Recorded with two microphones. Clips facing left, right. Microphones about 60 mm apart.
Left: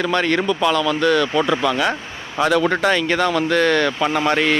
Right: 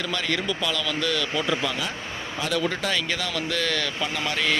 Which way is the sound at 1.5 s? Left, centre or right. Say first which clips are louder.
Left 8 dB; left.